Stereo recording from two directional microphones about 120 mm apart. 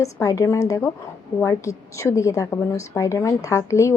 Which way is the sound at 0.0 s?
25° left (ahead or behind).